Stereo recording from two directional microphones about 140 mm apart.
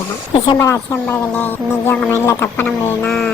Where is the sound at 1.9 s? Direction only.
20° left (ahead or behind).